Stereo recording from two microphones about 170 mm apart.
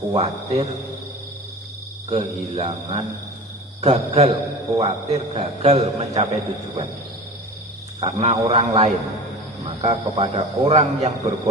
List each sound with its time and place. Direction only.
0.1 s a man's voice: 40° right (ahead or behind)
2.0 s a man's voice: 40° right (ahead or behind)
8.0 s a man's voice: 40° right (ahead or behind)